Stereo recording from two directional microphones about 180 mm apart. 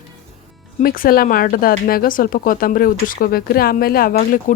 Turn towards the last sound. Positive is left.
turn(degrees=45)  # may be behind; listen again after turning